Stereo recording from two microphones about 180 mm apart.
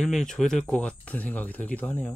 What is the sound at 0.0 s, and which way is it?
Speech, 5° left (ahead or behind).